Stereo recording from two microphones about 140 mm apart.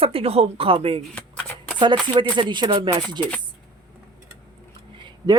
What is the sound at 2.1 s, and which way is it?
Speech, 35° right (ahead or behind).